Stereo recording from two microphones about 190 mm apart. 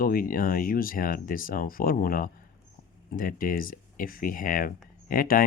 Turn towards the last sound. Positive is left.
turn(degrees=50)  # may be behind; listen again after turning